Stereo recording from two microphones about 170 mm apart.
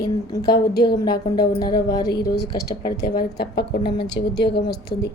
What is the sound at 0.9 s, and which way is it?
Speech, 25° left (ahead or behind).